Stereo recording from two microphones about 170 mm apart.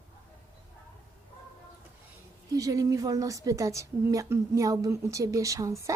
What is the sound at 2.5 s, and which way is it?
A woman's voice, 20° right (ahead or behind).